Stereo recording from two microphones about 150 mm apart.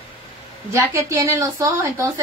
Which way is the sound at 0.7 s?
20° right (ahead or behind).